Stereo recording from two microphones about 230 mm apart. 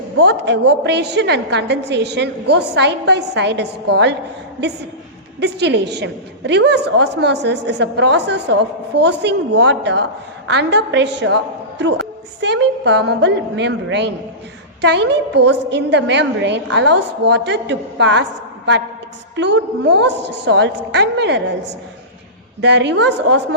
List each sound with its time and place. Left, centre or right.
0.2 s a woman's voice: right
5.4 s a woman's voice: right
12.4 s a woman's voice: right
22.6 s a woman's voice: right